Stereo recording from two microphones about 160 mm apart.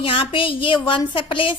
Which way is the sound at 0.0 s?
35° left (ahead or behind).